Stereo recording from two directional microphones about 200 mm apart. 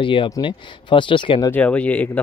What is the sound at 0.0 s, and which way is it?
Speech, 25° left (ahead or behind).